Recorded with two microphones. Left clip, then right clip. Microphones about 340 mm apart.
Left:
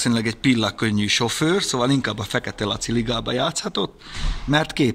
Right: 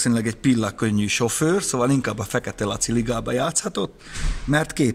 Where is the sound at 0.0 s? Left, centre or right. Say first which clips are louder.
Left 1 dB; centre.